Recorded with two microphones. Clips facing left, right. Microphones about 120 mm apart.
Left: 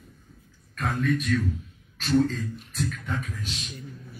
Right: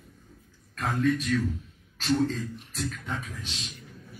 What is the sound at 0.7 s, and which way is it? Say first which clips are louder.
Speech: even; 30° right (ahead or behind).